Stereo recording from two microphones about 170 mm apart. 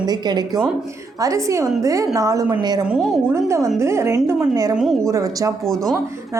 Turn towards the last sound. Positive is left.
turn(degrees=-20)  # may be behind; listen again after turning